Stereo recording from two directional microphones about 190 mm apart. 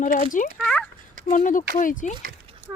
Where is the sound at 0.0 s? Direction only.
45° left (ahead or behind).